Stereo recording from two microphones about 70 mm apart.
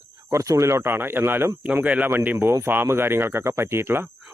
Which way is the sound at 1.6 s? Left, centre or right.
Right.